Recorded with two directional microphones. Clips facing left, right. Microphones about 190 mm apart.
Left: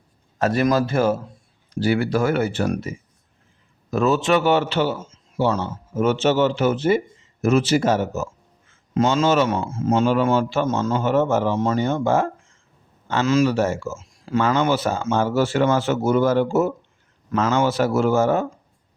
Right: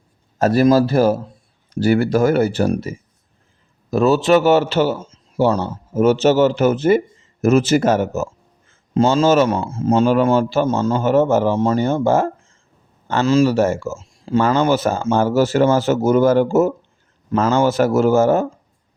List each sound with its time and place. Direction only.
0.3 s a man's voice: 40° right (ahead or behind)
3.9 s a man's voice: 35° right (ahead or behind)
9.0 s a man's voice: 30° right (ahead or behind)
13.6 s a man's voice: 45° right (ahead or behind)
17.2 s speech: 30° right (ahead or behind)
17.7 s speech: 45° right (ahead or behind)